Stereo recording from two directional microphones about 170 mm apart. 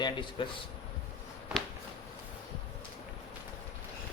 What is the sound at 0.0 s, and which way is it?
Speech, 30° left (ahead or behind).